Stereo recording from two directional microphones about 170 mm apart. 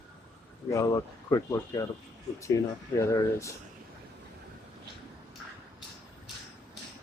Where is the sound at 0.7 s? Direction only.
20° left (ahead or behind).